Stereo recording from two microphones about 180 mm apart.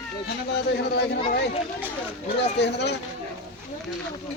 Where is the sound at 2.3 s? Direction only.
70° left (ahead or behind).